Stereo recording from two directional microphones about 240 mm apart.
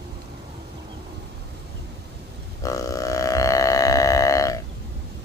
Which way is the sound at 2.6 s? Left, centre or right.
Centre.